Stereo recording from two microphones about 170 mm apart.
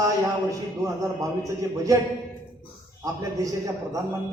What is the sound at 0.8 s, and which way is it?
A man's voice, 20° right (ahead or behind).